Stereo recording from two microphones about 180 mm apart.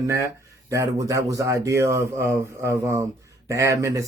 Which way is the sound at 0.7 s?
15° right (ahead or behind).